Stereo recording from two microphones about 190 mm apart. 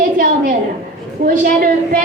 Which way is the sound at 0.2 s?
50° right (ahead or behind).